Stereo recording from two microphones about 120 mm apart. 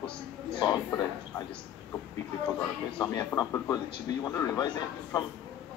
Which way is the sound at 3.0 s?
35° left (ahead or behind).